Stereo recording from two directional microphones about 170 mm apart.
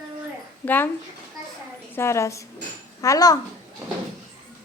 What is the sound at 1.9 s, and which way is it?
A woman's voice, 15° left (ahead or behind).